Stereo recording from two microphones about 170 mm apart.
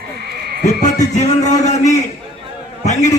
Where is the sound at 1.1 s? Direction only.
45° left (ahead or behind).